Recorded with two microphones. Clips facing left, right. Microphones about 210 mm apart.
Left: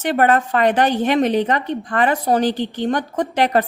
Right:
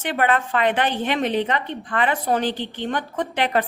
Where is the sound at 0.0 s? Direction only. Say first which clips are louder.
Left 5 dB; 40° left (ahead or behind).